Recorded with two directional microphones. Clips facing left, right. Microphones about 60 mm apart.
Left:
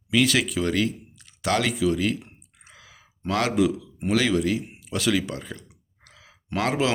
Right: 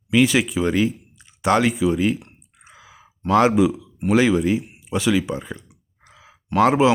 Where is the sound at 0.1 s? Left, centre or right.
Centre.